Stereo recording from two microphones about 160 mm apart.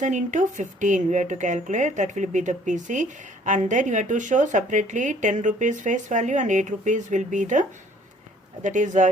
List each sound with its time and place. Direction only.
0.0 s speech: 50° right (ahead or behind)
8.6 s speech: 50° right (ahead or behind)